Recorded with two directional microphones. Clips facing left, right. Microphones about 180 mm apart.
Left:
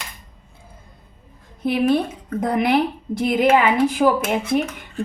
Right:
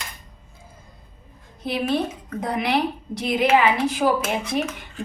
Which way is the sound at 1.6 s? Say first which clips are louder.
Left 5 dB; 50° left (ahead or behind).